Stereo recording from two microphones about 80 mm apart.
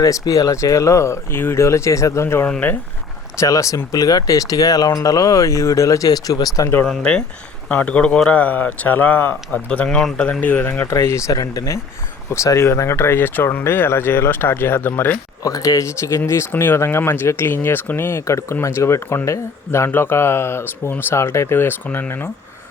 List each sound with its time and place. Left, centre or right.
0.0 s speech: left
3.4 s speech: left
6.8 s speech: centre
10.4 s speech: centre
15.4 s speech: left
21.8 s speech: centre